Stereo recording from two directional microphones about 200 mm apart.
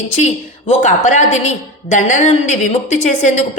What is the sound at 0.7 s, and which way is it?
Speech, 35° left (ahead or behind).